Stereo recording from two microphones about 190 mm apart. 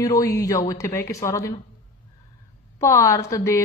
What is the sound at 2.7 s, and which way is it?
Speech, 15° left (ahead or behind).